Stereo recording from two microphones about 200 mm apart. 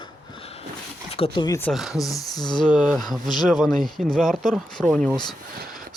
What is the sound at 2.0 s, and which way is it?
Speech, 15° left (ahead or behind).